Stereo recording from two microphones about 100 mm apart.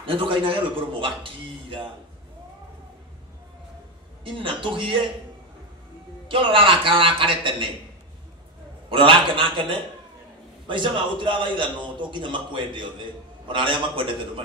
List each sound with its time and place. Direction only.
0.0 s a man's voice: 60° right (ahead or behind)
4.2 s a man's voice: 60° right (ahead or behind)
6.2 s a man's voice: 60° right (ahead or behind)
8.9 s a man's voice: 60° right (ahead or behind)